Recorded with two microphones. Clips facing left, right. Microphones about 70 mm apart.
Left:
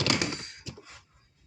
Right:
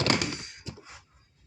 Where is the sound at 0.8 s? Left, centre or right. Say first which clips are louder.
Right 1 dB; centre.